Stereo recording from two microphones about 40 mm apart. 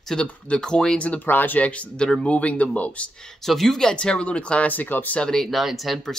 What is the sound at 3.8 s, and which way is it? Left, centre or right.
Speech, centre.